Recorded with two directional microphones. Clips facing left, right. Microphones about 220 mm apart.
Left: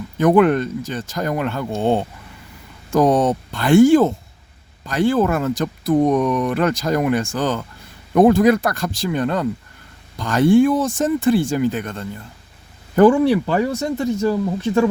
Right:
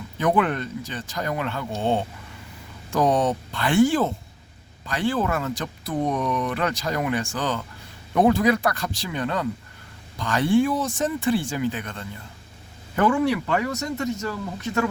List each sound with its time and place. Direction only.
0.2 s speech: 45° left (ahead or behind)
13.0 s speech: 30° left (ahead or behind)